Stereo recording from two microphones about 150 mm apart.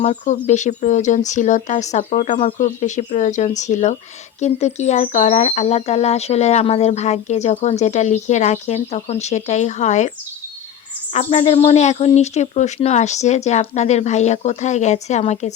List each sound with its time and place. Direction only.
0.0 s speech: 50° left (ahead or behind)
11.1 s speech: 45° left (ahead or behind)